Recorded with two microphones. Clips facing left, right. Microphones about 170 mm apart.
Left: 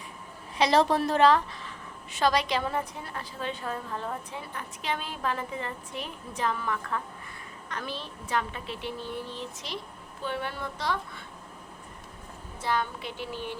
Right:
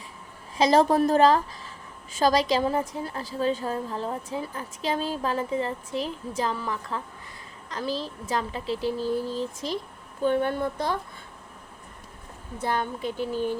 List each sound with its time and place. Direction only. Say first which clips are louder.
0.7 s a woman's voice: right 4 dB; 45° right (ahead or behind)
12.6 s a woman's voice: right 3 dB; 45° right (ahead or behind)